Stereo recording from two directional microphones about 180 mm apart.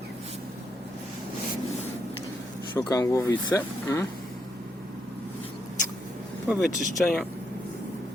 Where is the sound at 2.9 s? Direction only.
20° left (ahead or behind).